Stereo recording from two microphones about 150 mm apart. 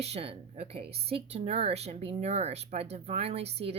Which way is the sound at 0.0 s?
40° right (ahead or behind).